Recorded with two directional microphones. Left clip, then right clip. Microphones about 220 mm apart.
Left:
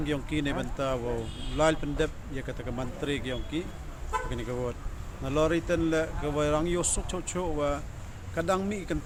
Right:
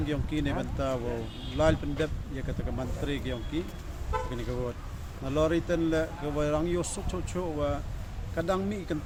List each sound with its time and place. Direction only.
0.0 s speech: 5° left (ahead or behind)
4.1 s toot: 50° left (ahead or behind)
5.2 s speech: 5° left (ahead or behind)